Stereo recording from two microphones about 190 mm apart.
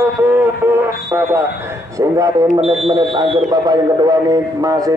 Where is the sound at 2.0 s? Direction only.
15° right (ahead or behind).